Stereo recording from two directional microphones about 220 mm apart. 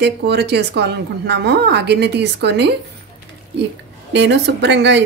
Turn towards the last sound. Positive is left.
turn(degrees=-50)  # may be behind; listen again after turning